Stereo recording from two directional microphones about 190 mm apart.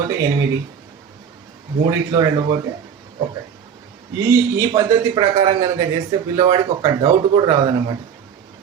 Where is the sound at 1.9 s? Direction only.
20° right (ahead or behind).